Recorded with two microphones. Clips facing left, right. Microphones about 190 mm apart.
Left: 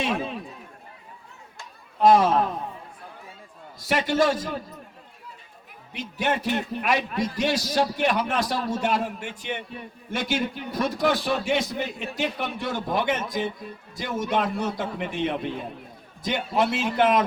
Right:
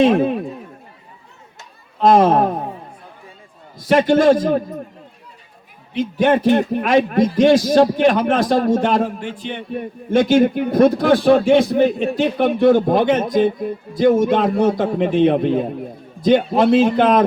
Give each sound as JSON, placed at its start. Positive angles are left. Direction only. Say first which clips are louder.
{"t": 0.0, "sound": "a man's voice", "louder": "right 13 dB", "side_deg": -55}
{"t": 2.0, "sound": "speech", "louder": "right 5 dB", "side_deg": -55}
{"t": 3.8, "sound": "a man's voice", "louder": "right 10 dB", "side_deg": -55}
{"t": 6.0, "sound": "a man's voice", "louder": "right 11 dB", "side_deg": -55}